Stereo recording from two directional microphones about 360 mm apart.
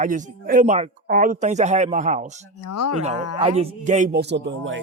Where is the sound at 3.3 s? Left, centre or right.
Centre.